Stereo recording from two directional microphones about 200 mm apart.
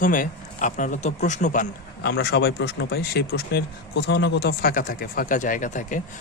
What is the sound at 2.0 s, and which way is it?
Speech, 55° left (ahead or behind).